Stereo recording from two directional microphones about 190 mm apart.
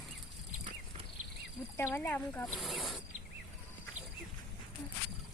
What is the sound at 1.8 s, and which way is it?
Speech, 10° left (ahead or behind).